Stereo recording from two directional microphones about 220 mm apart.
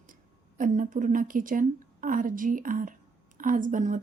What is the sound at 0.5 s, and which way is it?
A woman's voice, 35° right (ahead or behind).